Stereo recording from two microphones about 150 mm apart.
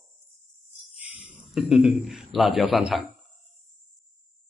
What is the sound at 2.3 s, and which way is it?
Speech, centre (ahead or behind).